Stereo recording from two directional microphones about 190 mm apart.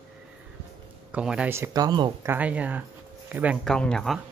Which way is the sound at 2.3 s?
5° right (ahead or behind).